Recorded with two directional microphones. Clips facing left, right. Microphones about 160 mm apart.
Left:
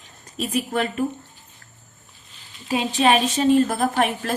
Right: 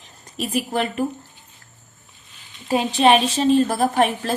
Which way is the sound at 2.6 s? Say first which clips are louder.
Right 3 dB; 35° right (ahead or behind).